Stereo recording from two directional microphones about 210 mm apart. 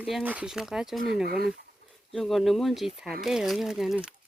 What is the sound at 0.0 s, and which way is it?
Speech, 5° right (ahead or behind).